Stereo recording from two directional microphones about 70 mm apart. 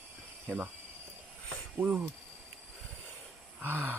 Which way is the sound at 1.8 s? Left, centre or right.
Right.